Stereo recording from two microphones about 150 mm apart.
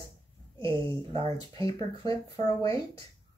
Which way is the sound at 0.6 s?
35° right (ahead or behind).